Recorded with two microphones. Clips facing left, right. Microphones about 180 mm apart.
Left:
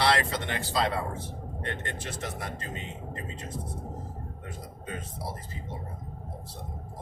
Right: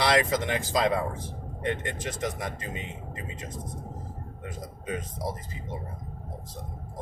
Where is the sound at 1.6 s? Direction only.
15° right (ahead or behind).